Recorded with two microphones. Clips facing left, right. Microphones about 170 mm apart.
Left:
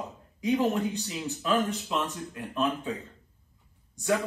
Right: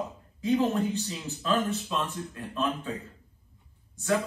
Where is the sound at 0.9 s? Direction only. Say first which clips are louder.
Even; 15° left (ahead or behind).